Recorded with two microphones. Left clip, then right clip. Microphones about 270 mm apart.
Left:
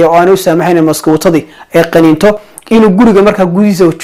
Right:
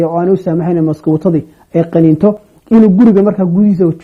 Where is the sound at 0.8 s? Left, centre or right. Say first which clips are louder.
Left 5 dB; left.